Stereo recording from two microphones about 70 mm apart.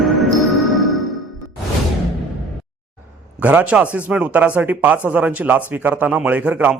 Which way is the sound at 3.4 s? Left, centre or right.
Right.